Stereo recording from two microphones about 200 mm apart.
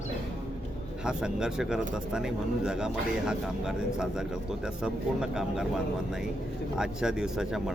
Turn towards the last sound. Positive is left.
turn(degrees=0)  # may be behind; listen again after turning